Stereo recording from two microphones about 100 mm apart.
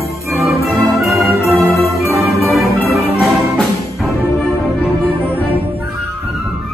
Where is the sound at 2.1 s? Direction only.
25° right (ahead or behind).